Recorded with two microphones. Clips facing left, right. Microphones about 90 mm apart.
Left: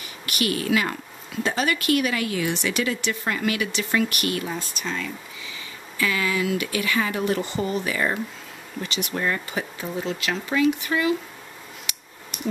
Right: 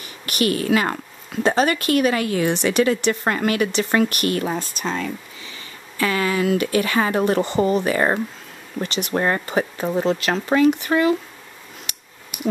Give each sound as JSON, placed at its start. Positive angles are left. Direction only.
{"t": 0.3, "sound": "speech", "side_deg": -40}